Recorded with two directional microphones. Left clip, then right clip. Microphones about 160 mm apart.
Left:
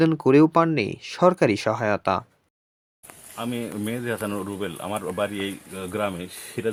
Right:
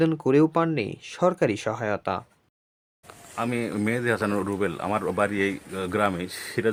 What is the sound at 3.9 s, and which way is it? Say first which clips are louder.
Speech: right 4 dB; 25° right (ahead or behind).